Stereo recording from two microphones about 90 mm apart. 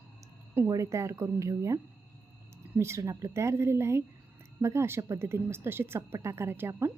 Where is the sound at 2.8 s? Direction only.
30° right (ahead or behind).